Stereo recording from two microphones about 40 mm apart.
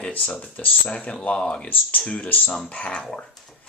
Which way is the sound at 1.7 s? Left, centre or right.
Left.